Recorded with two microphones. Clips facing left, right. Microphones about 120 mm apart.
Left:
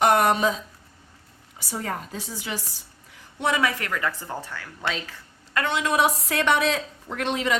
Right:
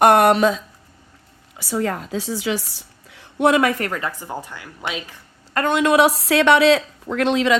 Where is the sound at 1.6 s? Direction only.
90° right; by 3.7 s 60° right (ahead or behind).